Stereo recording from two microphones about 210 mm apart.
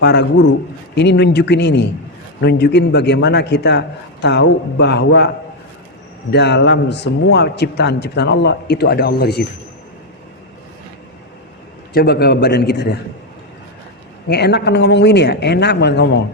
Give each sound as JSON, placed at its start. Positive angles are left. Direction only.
{"t": 0.0, "sound": "a man's voice", "side_deg": 55}
{"t": 6.3, "sound": "a man's voice", "side_deg": 55}
{"t": 11.9, "sound": "a man's voice", "side_deg": 50}
{"t": 14.3, "sound": "a man's voice", "side_deg": 50}